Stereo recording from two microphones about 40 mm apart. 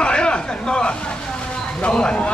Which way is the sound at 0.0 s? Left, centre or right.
Left.